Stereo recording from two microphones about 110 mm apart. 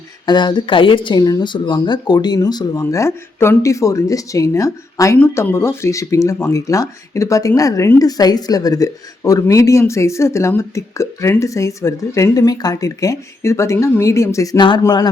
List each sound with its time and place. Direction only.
0.3 s speech: 45° left (ahead or behind)
14.6 s speech: 45° left (ahead or behind)